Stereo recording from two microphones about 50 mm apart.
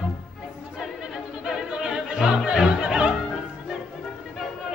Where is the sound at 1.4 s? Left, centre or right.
Centre.